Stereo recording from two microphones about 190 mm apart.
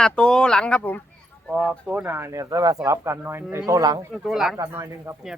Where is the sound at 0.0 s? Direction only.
5° left (ahead or behind); by 4.0 s 20° right (ahead or behind).